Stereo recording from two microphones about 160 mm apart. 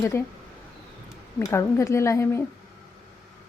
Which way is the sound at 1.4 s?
20° left (ahead or behind).